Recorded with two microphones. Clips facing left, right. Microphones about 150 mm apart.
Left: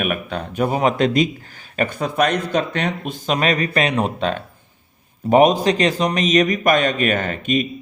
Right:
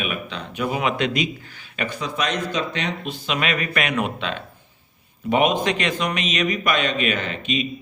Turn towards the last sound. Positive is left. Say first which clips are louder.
# left 5 dB
turn(degrees=50)  # may be behind; listen again after turning